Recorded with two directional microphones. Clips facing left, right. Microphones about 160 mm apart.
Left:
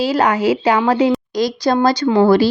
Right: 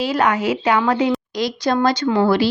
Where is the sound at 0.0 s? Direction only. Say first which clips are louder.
Left 3 dB; 35° left (ahead or behind).